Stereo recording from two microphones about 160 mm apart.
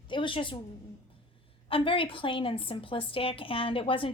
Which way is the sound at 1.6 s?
35° left (ahead or behind).